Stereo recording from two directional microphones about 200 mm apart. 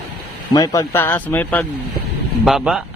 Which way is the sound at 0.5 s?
20° left (ahead or behind).